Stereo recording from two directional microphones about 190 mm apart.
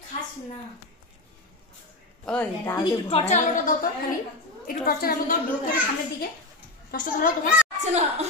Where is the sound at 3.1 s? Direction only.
35° left (ahead or behind).